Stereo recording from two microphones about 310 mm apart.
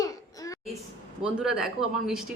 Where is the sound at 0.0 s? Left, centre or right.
Centre.